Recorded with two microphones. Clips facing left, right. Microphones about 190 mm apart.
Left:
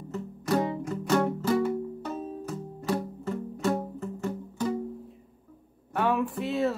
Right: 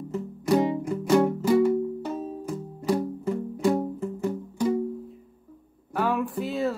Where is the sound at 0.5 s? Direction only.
15° right (ahead or behind).